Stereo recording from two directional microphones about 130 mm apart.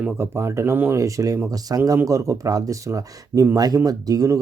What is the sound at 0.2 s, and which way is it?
Speech, 20° right (ahead or behind).